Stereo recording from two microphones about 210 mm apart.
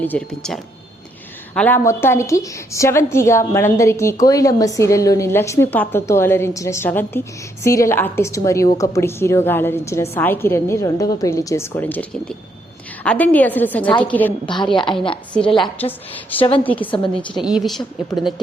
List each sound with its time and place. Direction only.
0.0 s a woman's voice: 5° left (ahead or behind)
14.4 s a woman's voice: 25° left (ahead or behind)
15.8 s a woman's voice: 10° left (ahead or behind)